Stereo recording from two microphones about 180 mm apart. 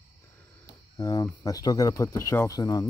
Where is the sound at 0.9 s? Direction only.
20° left (ahead or behind).